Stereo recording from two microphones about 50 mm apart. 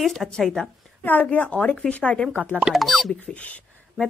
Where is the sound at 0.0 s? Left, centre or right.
Centre.